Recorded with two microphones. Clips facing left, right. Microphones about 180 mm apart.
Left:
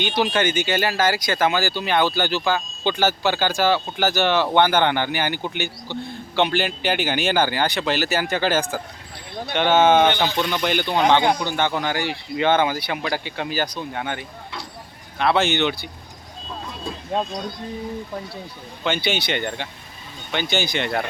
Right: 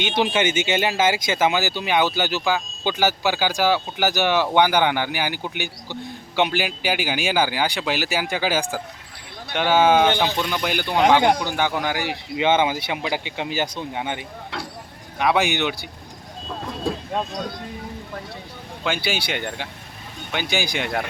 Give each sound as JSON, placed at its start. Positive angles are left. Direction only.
{"t": 0.1, "sound": "speech", "side_deg": -20}
{"t": 19.0, "sound": "speech", "side_deg": -10}